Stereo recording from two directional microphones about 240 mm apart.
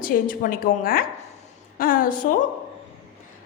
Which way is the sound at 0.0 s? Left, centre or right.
Left.